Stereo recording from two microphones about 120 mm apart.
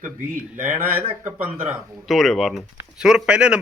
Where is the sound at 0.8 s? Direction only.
15° right (ahead or behind).